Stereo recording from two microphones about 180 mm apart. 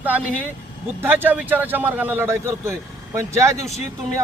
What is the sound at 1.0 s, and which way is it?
Speech, 10° right (ahead or behind).